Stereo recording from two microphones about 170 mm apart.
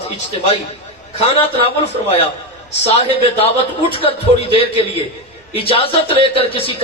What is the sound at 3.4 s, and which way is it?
Speech, 35° left (ahead or behind).